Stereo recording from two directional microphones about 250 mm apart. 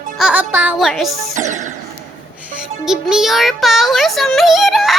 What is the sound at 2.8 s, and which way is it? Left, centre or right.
Music, centre.